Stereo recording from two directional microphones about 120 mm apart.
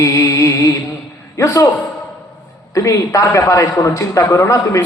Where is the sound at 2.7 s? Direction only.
25° left (ahead or behind).